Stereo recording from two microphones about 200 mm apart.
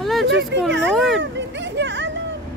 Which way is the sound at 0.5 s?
60° right (ahead or behind).